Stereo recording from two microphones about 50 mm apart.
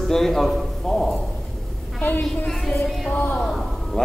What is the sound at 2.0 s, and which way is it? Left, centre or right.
Speech, left.